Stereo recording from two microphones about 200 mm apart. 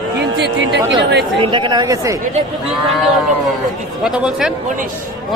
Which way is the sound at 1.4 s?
25° right (ahead or behind).